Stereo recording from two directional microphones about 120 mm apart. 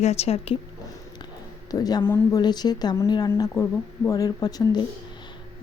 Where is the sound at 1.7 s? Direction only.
30° left (ahead or behind).